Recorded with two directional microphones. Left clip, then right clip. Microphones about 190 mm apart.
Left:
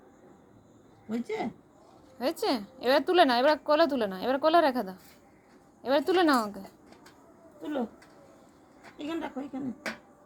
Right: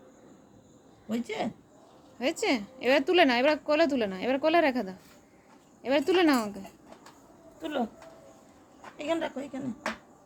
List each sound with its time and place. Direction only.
1.1 s a woman's voice: 20° right (ahead or behind)
2.1 s a woman's voice: centre (ahead or behind)
7.6 s a woman's voice: 25° right (ahead or behind)
9.0 s a woman's voice: 25° right (ahead or behind)